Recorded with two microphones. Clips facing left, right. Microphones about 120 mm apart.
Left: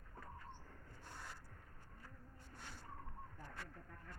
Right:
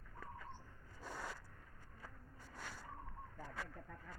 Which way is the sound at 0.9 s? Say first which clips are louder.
Right 7 dB; 90° right.